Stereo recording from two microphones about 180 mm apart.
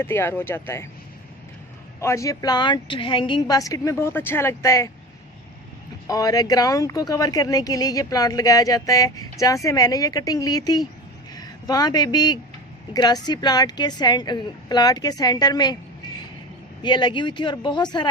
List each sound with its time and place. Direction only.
0.0 s speech: 10° left (ahead or behind)
2.0 s speech: 15° left (ahead or behind)
6.1 s speech: 20° left (ahead or behind)
16.8 s speech: 25° left (ahead or behind)